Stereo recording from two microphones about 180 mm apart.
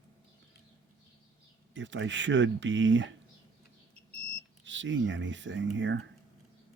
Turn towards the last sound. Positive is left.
turn(degrees=-90)